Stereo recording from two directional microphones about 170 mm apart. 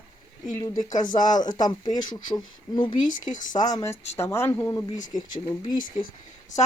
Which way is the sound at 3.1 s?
50° left (ahead or behind).